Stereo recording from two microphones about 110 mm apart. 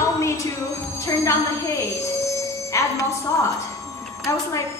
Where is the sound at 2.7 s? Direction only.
30° left (ahead or behind).